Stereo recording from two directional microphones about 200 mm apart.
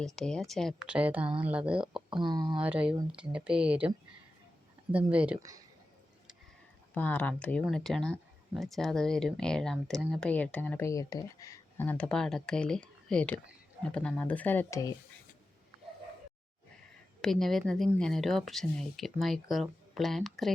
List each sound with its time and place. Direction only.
0.0 s speech: 5° left (ahead or behind)
2.2 s speech: 20° right (ahead or behind)
2.6 s speech: 5° right (ahead or behind)
6.9 s speech: 5° left (ahead or behind)
17.2 s speech: centre (ahead or behind)